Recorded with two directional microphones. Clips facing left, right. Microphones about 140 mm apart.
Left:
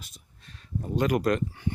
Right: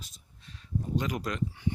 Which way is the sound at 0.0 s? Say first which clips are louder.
Left 1 dB; 60° left (ahead or behind).